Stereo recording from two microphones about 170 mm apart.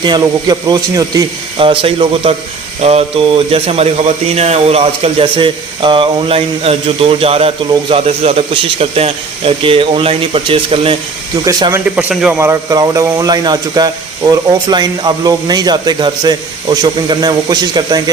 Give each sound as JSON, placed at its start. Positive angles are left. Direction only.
{"t": 0.0, "sound": "speech", "side_deg": -25}
{"t": 11.4, "sound": "speech", "side_deg": -20}
{"t": 11.9, "sound": "speech", "side_deg": -5}